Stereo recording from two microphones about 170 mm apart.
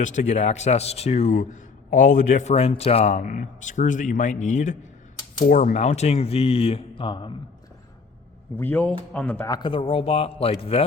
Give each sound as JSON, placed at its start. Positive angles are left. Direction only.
{"t": 0.0, "sound": "speech", "side_deg": 45}
{"t": 8.5, "sound": "speech", "side_deg": 10}
{"t": 9.5, "sound": "speech", "side_deg": 25}